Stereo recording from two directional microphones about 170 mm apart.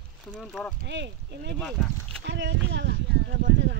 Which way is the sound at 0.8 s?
90° right.